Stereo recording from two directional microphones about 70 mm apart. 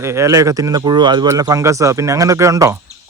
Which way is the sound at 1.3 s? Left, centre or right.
Right.